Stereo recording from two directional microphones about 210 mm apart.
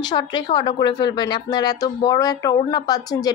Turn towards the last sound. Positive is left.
turn(degrees=20)  # may be behind; listen again after turning